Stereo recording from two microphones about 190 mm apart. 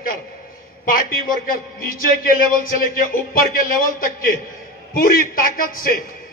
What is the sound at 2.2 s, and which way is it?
A man's voice, 50° left (ahead or behind).